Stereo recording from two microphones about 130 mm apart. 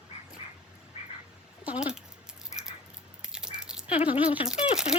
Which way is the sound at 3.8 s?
45° left (ahead or behind).